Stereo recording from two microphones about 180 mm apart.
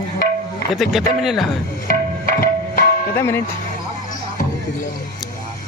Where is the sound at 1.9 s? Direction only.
50° left (ahead or behind).